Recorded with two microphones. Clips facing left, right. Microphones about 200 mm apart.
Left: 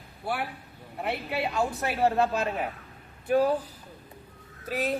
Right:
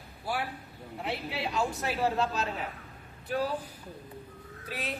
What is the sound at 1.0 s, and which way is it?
A woman's voice, 60° left (ahead or behind).